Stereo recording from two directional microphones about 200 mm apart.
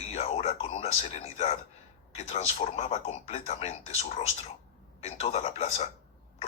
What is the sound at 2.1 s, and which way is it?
Speech, 35° left (ahead or behind).